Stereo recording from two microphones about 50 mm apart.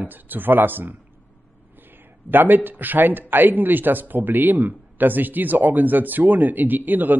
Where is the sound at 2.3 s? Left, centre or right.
Right.